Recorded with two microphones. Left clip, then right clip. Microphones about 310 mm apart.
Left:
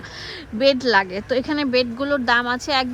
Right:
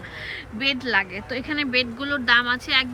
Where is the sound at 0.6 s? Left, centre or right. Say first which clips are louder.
Left 6 dB; centre.